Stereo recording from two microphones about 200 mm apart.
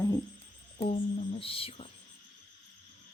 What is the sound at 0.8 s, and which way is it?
A woman's voice, 30° left (ahead or behind).